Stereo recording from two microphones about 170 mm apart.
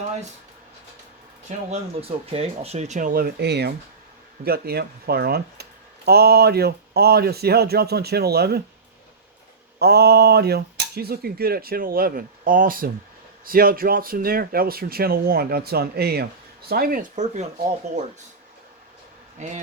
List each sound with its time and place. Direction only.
1.5 s speech: 35° right (ahead or behind); by 8.6 s 70° right (ahead or behind)
9.7 s cutlery: 70° right (ahead or behind); by 17.4 s 50° right (ahead or behind)
19.4 s speech: 45° right (ahead or behind)